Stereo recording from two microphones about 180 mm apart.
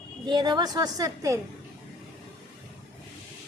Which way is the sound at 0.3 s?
25° right (ahead or behind).